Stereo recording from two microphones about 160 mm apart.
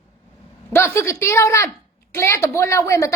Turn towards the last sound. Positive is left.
turn(degrees=20)  # may be behind; listen again after turning